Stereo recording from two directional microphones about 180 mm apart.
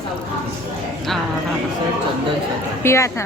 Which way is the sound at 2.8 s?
15° left (ahead or behind).